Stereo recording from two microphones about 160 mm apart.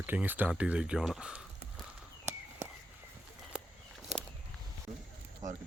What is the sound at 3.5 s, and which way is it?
Walk, 5° right (ahead or behind).